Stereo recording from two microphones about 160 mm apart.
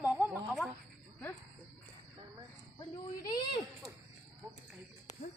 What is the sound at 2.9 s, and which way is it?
Speech, 30° left (ahead or behind).